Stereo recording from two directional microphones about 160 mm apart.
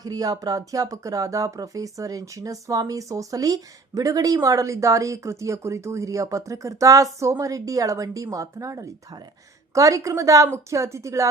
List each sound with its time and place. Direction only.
0.0 s speech: 25° right (ahead or behind)